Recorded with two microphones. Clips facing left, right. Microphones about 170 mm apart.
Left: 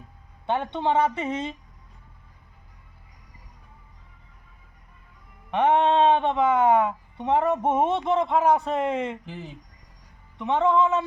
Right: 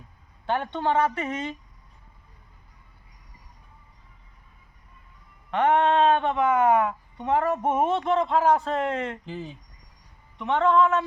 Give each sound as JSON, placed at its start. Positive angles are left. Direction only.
{"t": 0.4, "sound": "speech", "side_deg": 20}
{"t": 5.5, "sound": "speech", "side_deg": 20}
{"t": 10.3, "sound": "speech", "side_deg": 15}